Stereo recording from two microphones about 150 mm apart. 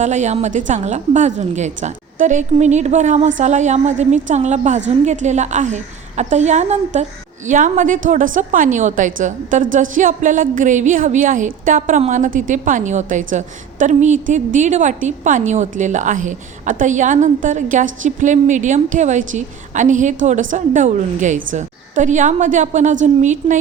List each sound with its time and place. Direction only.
0.0 s a woman's voice: 50° right (ahead or behind)